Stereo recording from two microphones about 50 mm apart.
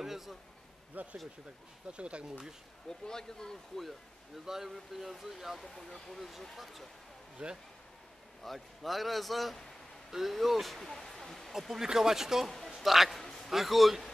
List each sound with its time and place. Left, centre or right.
0.0 s a man's voice: centre
1.0 s speech: right
3.1 s speech: centre
4.5 s speech: centre
7.4 s speech: centre
8.5 s speech: centre
11.5 s speech: centre
12.4 s a man's voice: centre
13.2 s a sound: centre
13.5 s speech: centre